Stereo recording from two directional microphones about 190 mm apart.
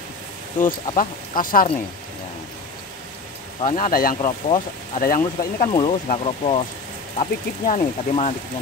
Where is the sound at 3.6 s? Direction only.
40° left (ahead or behind).